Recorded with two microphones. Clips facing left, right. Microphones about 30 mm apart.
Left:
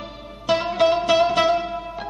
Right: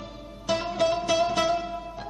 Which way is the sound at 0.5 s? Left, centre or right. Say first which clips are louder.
Left 6 dB; left.